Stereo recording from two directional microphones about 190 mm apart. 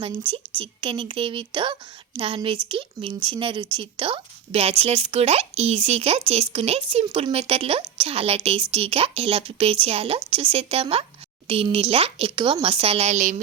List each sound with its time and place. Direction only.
0.0 s speech: 25° right (ahead or behind)